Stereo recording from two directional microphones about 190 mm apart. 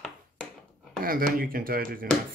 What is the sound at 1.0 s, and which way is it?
Speech, 50° right (ahead or behind).